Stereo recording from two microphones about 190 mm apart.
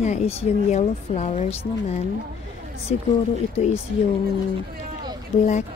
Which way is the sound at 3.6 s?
35° left (ahead or behind).